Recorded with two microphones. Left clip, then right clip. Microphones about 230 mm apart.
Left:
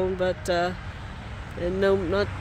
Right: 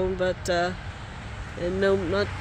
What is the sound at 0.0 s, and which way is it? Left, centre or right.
Speech, centre.